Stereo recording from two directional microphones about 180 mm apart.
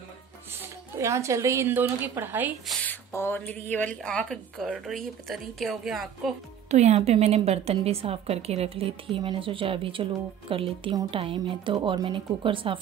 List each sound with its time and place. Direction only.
0.9 s a woman's voice: 15° right (ahead or behind)
2.6 s a sound: 10° left (ahead or behind)
3.7 s a woman's voice: 5° left (ahead or behind)
6.7 s a woman's voice: 40° right (ahead or behind)